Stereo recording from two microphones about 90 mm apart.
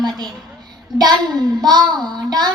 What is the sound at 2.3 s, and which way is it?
Child singing, 50° right (ahead or behind).